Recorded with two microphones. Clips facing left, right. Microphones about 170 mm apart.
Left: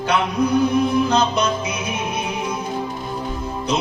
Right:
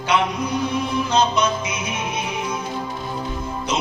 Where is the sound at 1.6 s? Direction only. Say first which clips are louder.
Left 2 dB; 60° left (ahead or behind).